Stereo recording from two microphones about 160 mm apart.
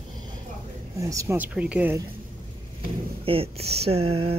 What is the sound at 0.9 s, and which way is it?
Speech, 20° right (ahead or behind).